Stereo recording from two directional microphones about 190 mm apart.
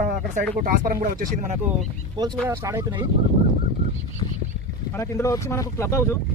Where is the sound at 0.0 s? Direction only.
40° right (ahead or behind).